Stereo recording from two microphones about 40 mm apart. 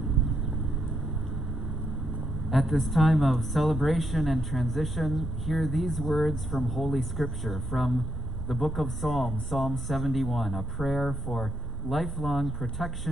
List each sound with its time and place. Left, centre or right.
2.5 s a woman's voice: centre